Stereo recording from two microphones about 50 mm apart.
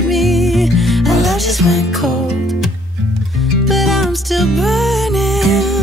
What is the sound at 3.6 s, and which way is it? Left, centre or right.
Music, centre.